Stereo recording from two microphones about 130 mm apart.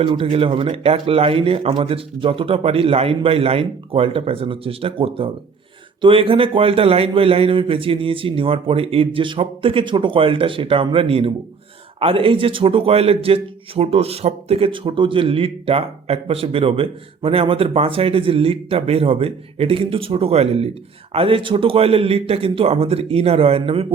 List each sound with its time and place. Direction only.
0.0 s a man's voice: 40° right (ahead or behind)